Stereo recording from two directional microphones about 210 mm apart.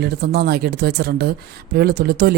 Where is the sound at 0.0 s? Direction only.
50° right (ahead or behind).